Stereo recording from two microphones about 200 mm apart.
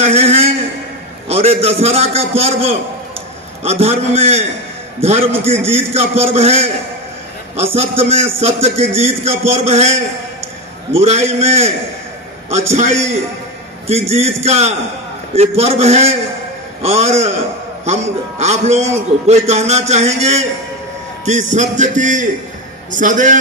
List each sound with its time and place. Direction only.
0.0 s a sound: 30° right (ahead or behind)
1.3 s a man's voice: 30° right (ahead or behind)
12.7 s a man's voice: 35° right (ahead or behind)
18.4 s a man's voice: 35° right (ahead or behind)